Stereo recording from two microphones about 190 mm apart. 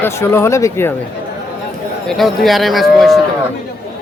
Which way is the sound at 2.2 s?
Centre (ahead or behind).